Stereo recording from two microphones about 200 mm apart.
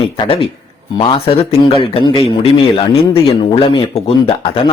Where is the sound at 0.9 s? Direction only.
25° left (ahead or behind).